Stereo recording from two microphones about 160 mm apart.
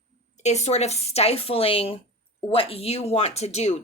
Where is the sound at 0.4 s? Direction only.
45° left (ahead or behind).